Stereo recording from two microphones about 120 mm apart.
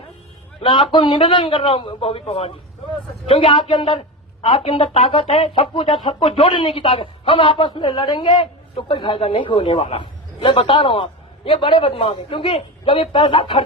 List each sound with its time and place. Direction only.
0.6 s a man's voice: 40° left (ahead or behind)